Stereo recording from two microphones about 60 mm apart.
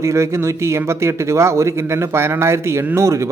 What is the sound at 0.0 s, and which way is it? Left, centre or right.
Speech, right.